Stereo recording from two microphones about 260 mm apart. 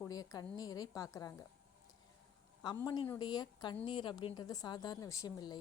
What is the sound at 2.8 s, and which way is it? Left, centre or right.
A woman's voice, centre.